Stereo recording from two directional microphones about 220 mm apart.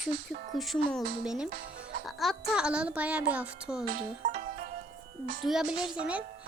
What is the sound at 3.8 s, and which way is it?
Music, 40° right (ahead or behind).